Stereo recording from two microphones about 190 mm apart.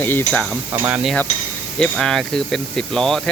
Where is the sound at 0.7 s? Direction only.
10° right (ahead or behind).